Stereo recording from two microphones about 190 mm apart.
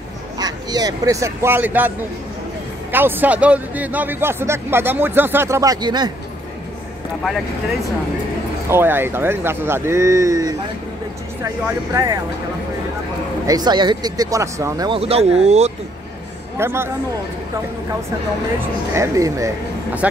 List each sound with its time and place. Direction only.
0.4 s speech: 20° right (ahead or behind)
8.6 s speech: 10° right (ahead or behind)
13.5 s speech: 20° right (ahead or behind)
14.9 s speech: 30° right (ahead or behind)
16.5 s speech: 15° right (ahead or behind)
18.9 s speech: 15° right (ahead or behind)